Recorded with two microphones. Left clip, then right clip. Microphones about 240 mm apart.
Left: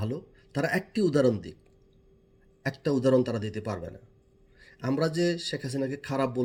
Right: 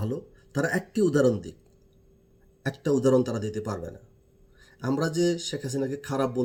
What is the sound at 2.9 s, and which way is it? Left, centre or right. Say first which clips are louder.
Speech: right 2 dB; centre.